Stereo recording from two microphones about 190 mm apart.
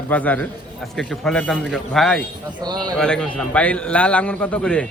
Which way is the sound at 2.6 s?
20° right (ahead or behind).